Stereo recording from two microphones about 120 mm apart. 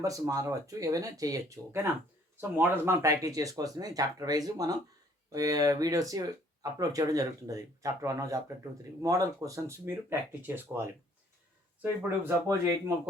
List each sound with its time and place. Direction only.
0.0 s speech: 30° right (ahead or behind)